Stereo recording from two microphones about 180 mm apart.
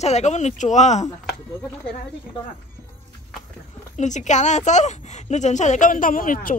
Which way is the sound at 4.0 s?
40° left (ahead or behind).